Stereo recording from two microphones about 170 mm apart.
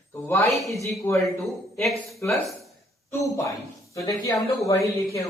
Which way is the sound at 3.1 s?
15° left (ahead or behind).